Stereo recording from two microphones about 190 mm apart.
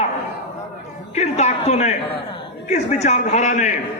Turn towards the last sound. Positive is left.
turn(degrees=40)  # may be behind; listen again after turning